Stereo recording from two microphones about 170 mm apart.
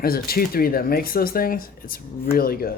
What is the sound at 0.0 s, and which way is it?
Speech, 60° left (ahead or behind).